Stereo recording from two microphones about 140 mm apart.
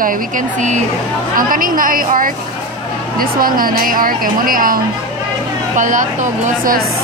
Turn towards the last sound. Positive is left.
turn(degrees=-75)  # may be behind; listen again after turning